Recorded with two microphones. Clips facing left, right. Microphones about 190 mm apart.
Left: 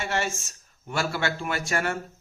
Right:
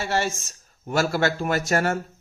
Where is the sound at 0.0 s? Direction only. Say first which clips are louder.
Right 3 dB; 35° right (ahead or behind).